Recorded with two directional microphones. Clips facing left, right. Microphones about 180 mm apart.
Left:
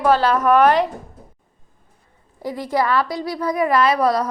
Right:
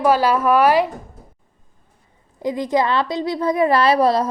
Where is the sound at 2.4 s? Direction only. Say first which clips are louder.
Right 2 dB; 20° right (ahead or behind).